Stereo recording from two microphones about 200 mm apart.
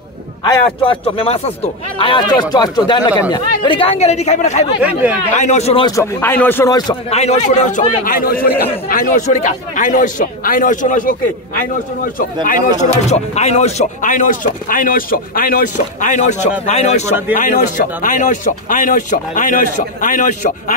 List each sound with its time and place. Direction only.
0.8 s speech: 30° left (ahead or behind)
4.8 s speech: 5° right (ahead or behind)
5.3 s a man's voice: 35° left (ahead or behind)
5.9 s speech: 15° left (ahead or behind)
7.1 s a man's voice: 35° left (ahead or behind)
13.1 s a man's voice: 35° left (ahead or behind)